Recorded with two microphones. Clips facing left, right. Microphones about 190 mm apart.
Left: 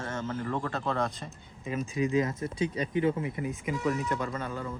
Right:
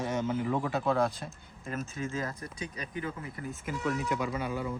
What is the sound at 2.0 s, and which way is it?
Speech, 20° left (ahead or behind).